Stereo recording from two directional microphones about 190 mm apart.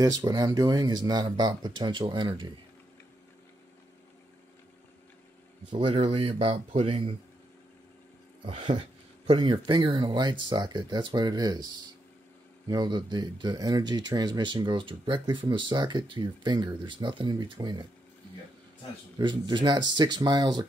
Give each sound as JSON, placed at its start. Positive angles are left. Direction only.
{"t": 0.0, "sound": "speech", "side_deg": -20}
{"t": 5.7, "sound": "speech", "side_deg": -25}
{"t": 8.5, "sound": "speech", "side_deg": -25}
{"t": 19.1, "sound": "speech", "side_deg": -25}